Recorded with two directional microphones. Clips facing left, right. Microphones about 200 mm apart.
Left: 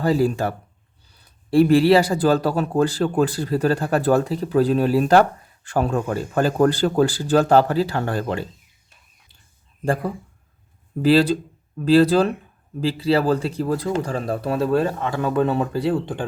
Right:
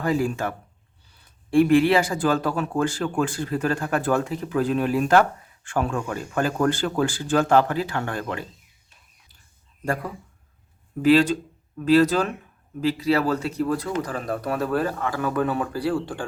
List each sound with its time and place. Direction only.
0.0 s speech: 35° left (ahead or behind)
9.8 s speech: 30° left (ahead or behind)